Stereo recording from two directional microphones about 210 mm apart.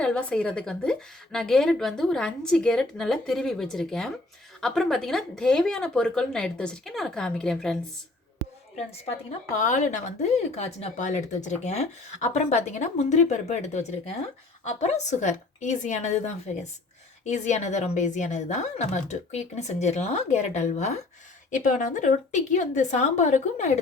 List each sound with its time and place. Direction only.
0.0 s a woman's voice: 5° left (ahead or behind)
9.6 s speech: 35° left (ahead or behind)